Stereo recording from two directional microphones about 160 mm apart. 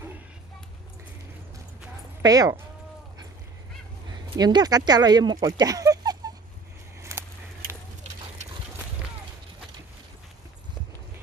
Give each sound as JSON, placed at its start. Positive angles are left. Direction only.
{"t": 2.2, "sound": "speech", "side_deg": -25}
{"t": 4.1, "sound": "speech", "side_deg": -25}
{"t": 7.0, "sound": "a sound", "side_deg": -15}